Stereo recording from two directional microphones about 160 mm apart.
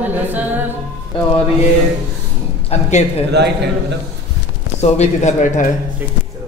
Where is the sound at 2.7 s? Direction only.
45° left (ahead or behind).